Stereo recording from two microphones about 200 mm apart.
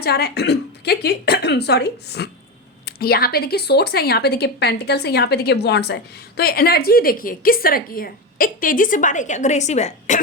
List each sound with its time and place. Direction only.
0.0 s a woman's voice: 55° left (ahead or behind); by 10.2 s 35° left (ahead or behind)